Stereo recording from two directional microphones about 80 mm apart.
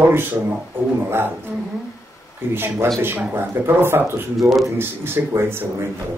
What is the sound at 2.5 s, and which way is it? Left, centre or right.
A man's voice, right.